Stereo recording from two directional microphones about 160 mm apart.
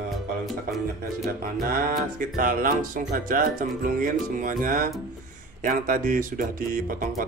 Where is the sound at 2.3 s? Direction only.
60° right (ahead or behind).